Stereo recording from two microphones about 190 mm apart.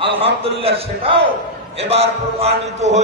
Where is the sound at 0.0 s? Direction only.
30° right (ahead or behind).